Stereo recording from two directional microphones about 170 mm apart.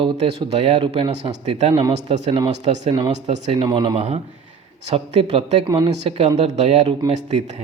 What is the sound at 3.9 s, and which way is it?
Speech, 40° right (ahead or behind).